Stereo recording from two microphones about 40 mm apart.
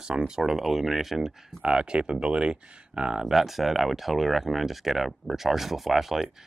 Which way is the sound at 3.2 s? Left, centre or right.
Centre.